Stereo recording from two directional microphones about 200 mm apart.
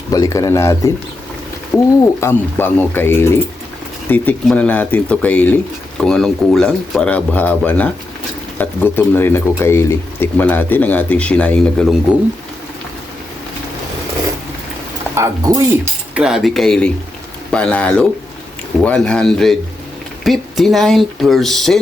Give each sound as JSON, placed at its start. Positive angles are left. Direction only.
{"t": 0.1, "sound": "speech", "side_deg": 15}
{"t": 2.2, "sound": "speech", "side_deg": 10}
{"t": 15.1, "sound": "speech", "side_deg": -15}